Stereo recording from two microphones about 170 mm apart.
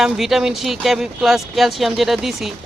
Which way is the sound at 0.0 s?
Centre (ahead or behind).